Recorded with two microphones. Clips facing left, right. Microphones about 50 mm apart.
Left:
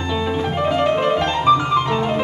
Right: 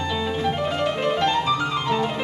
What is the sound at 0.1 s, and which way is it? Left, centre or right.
Music, centre.